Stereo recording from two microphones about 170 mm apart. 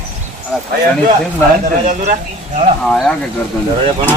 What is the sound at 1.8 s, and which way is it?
Speech, 50° right (ahead or behind).